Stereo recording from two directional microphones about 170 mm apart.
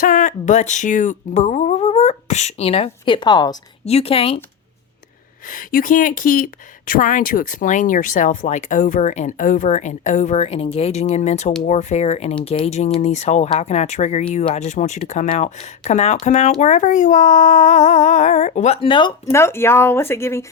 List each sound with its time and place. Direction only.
0.0 s speech: 50° left (ahead or behind); by 3.6 s 25° left (ahead or behind)
3.8 s speech: 35° left (ahead or behind)
5.5 s speech: 55° left (ahead or behind); by 20.4 s 15° left (ahead or behind)